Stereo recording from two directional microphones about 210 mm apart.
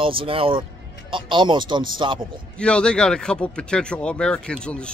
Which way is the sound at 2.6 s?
5° left (ahead or behind).